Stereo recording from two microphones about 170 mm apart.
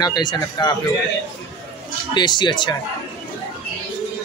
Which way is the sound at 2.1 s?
25° left (ahead or behind).